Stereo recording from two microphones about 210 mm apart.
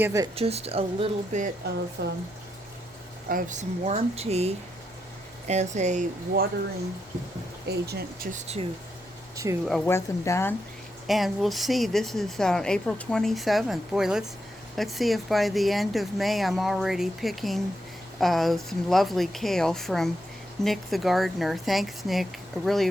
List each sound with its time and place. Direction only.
0.0 s speech: 15° right (ahead or behind)
0.3 s speech: 30° right (ahead or behind)
2.0 s speech: 50° right (ahead or behind)
3.2 s speech: 40° right (ahead or behind)
7.7 s speech: 50° right (ahead or behind)
9.3 s speech: 15° right (ahead or behind)
9.8 s speech: 15° left (ahead or behind)
11.0 s speech: centre (ahead or behind)